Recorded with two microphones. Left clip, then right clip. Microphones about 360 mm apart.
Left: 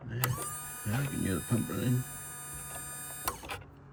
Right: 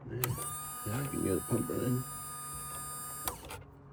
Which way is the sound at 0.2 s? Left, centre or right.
Centre.